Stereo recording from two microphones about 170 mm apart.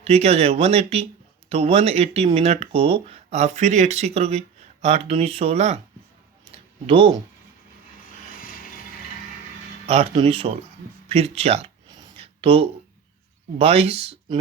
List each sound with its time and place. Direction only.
0.0 s speech: 40° right (ahead or behind)
6.5 s a sound: 30° right (ahead or behind)
8.4 s vehicle: 55° left (ahead or behind)
9.8 s speech: 40° right (ahead or behind)
11.9 s a sound: 25° right (ahead or behind)
13.6 s speech: 35° right (ahead or behind)